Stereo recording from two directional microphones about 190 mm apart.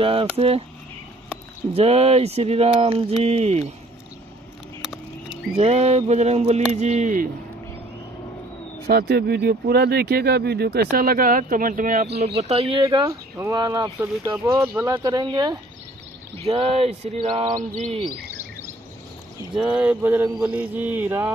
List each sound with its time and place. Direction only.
0.0 s speech: 30° right (ahead or behind)
1.7 s speech: 35° right (ahead or behind)
4.8 s a sound: 5° right (ahead or behind)
5.6 s speech: 35° right (ahead or behind)
8.8 s speech: 55° right (ahead or behind)
12.4 s speech: 30° right (ahead or behind)
16.4 s speech: 30° right (ahead or behind)
17.6 s speech: 40° right (ahead or behind)
19.5 s speech: 5° right (ahead or behind)